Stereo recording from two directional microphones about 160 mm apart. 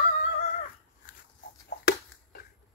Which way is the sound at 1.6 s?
70° left (ahead or behind).